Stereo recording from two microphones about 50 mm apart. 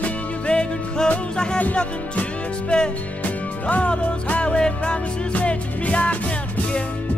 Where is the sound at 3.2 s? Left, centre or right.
Left.